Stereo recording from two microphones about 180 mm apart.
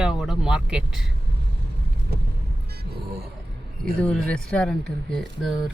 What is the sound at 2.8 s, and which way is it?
Music, 60° right (ahead or behind).